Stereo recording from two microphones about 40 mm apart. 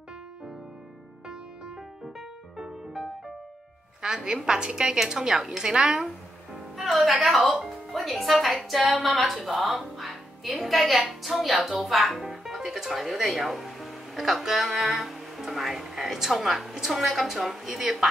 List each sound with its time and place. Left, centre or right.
2.1 s music: centre
4.0 s a woman's voice: right
6.8 s a woman's voice: centre